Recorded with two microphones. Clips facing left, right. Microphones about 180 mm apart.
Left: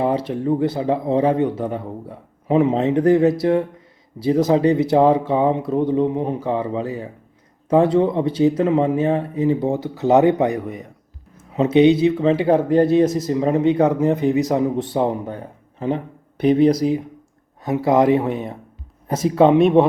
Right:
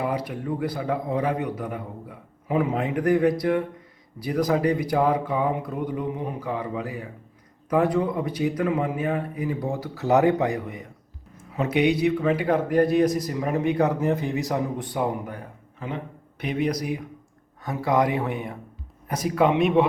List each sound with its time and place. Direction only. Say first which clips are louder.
0.0 s speech: left 7 dB; 25° left (ahead or behind)